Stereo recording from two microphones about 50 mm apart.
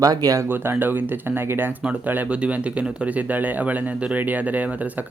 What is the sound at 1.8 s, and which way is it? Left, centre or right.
Speech, right.